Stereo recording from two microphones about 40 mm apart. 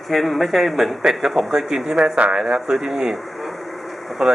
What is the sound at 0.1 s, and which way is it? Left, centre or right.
Speech, centre.